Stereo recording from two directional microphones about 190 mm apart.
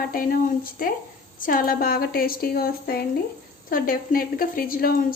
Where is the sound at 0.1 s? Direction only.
50° left (ahead or behind).